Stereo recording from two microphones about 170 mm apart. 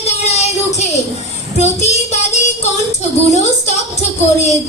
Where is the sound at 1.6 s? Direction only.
40° left (ahead or behind).